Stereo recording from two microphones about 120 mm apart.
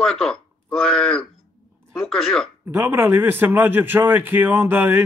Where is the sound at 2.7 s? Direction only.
20° right (ahead or behind).